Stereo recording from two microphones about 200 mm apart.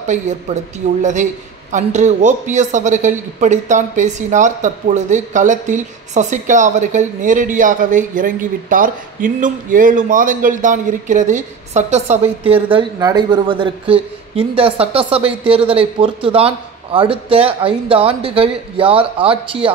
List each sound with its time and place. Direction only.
0.5 s a man's voice: 35° right (ahead or behind)